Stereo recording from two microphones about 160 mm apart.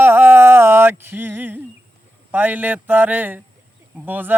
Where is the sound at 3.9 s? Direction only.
10° right (ahead or behind).